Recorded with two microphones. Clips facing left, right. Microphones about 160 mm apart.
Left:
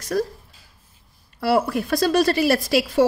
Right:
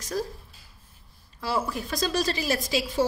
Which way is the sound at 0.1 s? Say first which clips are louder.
Left 7 dB; 65° left (ahead or behind).